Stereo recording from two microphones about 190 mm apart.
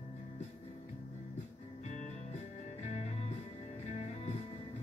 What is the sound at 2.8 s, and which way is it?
Music, 35° left (ahead or behind).